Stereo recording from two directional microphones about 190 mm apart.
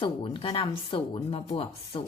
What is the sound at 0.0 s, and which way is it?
Speech, 25° left (ahead or behind).